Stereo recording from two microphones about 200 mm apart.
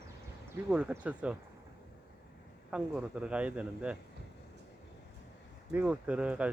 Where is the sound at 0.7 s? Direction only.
5° right (ahead or behind).